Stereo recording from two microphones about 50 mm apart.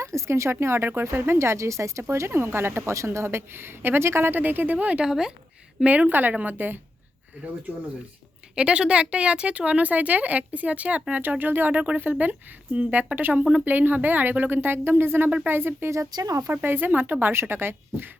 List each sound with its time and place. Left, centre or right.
0.0 s speech: right
0.6 s speech: right
2.9 s speech: right
4.4 s a woman's voice: right
5.0 s speech: centre
5.8 s a woman's voice: right
8.5 s a woman's voice: centre; by 11.8 s right
12.2 s a woman's voice: right
15.9 s speech: right
16.5 s speech: right